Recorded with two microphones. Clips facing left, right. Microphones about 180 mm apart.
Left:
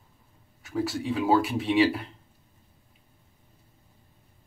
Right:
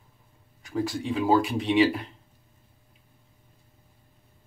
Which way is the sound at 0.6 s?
5° left (ahead or behind).